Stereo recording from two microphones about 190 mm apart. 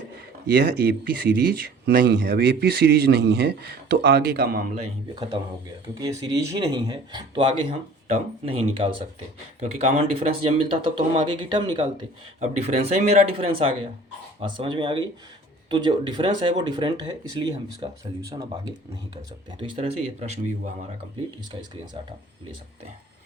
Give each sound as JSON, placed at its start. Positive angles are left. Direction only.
{"t": 0.4, "sound": "speech", "side_deg": -55}
{"t": 5.9, "sound": "speech", "side_deg": -20}
{"t": 12.4, "sound": "speech", "side_deg": -35}
{"t": 19.5, "sound": "speech", "side_deg": -30}